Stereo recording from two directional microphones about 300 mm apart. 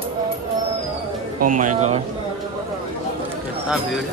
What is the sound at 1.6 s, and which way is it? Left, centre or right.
Speech, right.